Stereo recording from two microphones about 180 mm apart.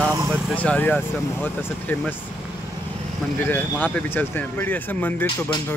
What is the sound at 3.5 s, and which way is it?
Speech, 10° left (ahead or behind).